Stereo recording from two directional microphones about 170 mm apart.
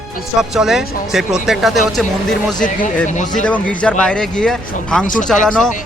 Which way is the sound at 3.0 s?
45° left (ahead or behind).